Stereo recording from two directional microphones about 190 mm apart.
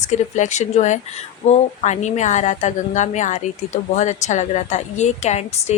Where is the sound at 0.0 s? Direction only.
40° left (ahead or behind).